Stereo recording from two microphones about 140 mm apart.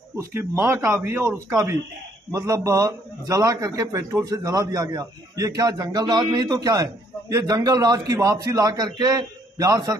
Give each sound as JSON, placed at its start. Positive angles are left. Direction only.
{"t": 0.2, "sound": "a man's voice", "side_deg": -15}